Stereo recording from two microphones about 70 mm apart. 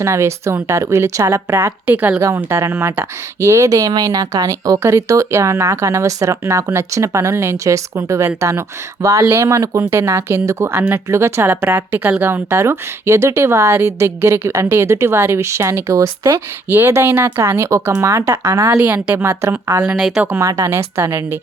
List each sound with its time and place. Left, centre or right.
0.0 s speech: right
1.9 s speech: right
2.2 s speech: right
4.8 s speech: right
16.6 s speech: right
19.8 s speech: centre
20.4 s speech: right